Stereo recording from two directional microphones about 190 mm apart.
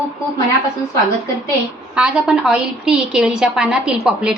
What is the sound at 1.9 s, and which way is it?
A woman's voice, 5° right (ahead or behind).